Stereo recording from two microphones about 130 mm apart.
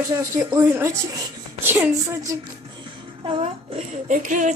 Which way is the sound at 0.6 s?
15° right (ahead or behind).